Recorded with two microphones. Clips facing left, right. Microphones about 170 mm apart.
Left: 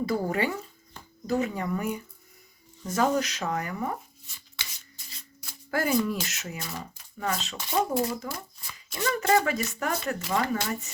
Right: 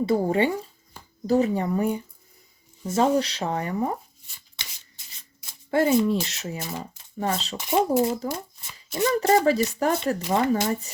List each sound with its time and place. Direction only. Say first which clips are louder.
0.0 s speech: right 5 dB; 25° right (ahead or behind)
5.5 s speech: right 6 dB; 25° right (ahead or behind)